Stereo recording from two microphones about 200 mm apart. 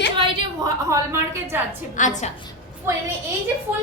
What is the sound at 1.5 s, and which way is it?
Speech, 10° right (ahead or behind).